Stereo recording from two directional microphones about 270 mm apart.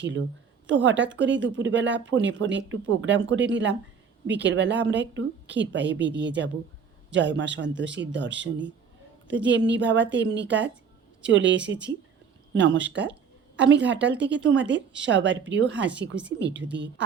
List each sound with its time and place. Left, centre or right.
0.7 s a woman's voice: right